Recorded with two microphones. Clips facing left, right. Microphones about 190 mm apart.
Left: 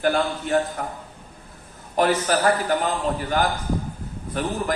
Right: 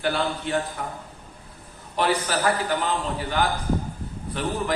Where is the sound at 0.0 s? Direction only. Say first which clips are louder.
Left 3 dB; 45° left (ahead or behind).